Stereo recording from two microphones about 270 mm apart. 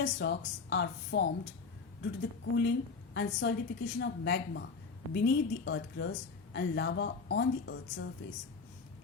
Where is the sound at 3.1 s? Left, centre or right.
Left.